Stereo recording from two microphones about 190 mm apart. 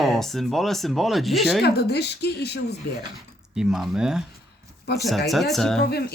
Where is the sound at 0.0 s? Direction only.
Centre (ahead or behind).